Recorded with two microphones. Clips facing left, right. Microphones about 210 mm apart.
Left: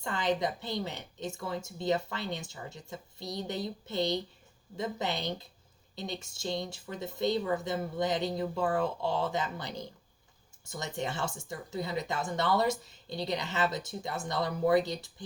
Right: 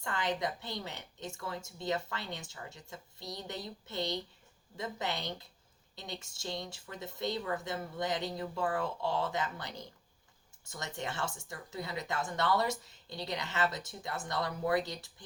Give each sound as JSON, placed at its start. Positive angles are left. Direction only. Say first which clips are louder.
{"t": 0.0, "sound": "a woman's voice", "louder": "left 4 dB", "side_deg": 20}
{"t": 10.7, "sound": "speech", "louder": "left 5 dB", "side_deg": 15}